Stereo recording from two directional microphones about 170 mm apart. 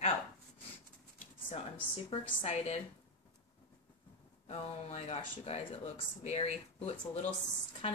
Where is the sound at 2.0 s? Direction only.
35° left (ahead or behind).